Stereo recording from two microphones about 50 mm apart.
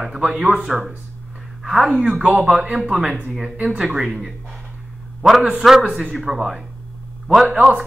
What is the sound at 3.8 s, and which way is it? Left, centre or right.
Speech, centre.